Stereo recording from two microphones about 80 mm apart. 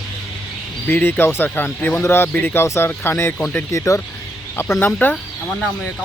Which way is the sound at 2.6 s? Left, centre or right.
Left.